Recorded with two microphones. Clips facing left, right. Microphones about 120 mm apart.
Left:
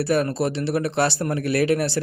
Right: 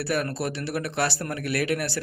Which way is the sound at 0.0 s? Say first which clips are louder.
Left 6 dB; 25° left (ahead or behind).